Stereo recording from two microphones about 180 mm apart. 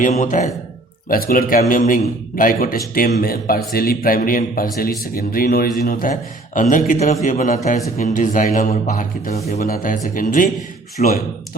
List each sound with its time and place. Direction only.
0.0 s a man's voice: 45° left (ahead or behind)
1.0 s a man's voice: 55° left (ahead or behind)